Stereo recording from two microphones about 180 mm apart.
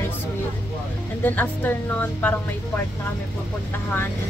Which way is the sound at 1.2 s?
10° left (ahead or behind).